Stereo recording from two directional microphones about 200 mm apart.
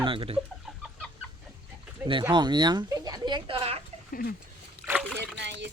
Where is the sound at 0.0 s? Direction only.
25° right (ahead or behind).